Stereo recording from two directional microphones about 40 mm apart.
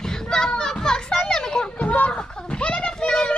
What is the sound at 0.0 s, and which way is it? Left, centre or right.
Children playing, centre.